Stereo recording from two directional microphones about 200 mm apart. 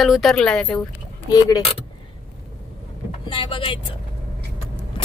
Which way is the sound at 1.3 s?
20° left (ahead or behind).